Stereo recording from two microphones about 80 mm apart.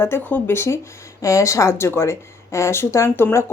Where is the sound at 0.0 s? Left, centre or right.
Left.